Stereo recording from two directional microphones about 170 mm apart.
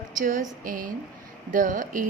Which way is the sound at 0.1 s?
55° right (ahead or behind).